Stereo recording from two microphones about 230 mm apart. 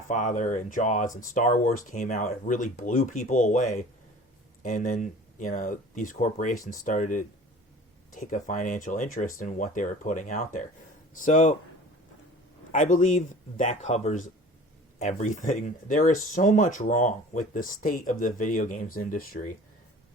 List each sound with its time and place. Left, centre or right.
0.1 s speech: left
12.7 s speech: left